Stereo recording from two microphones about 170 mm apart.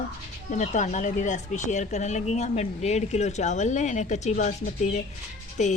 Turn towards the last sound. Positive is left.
turn(degrees=45)  # may be behind; listen again after turning